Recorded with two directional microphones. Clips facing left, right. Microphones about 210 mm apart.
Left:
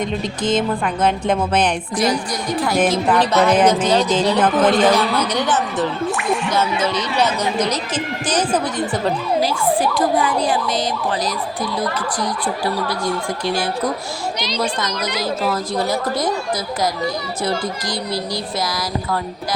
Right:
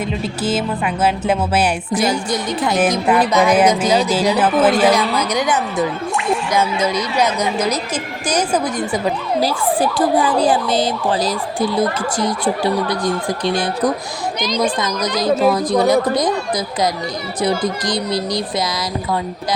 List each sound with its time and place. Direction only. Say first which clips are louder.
1.0 s speech: right 1 dB; 5° right (ahead or behind)
2.0 s speech: even; 25° right (ahead or behind)
2.7 s speech: right 1 dB; 5° right (ahead or behind)
9.8 s speech: right 2 dB; 30° right (ahead or behind)
15.2 s speech: right 8 dB; 15° right (ahead or behind)
17.4 s speech: right 5 dB; 20° right (ahead or behind)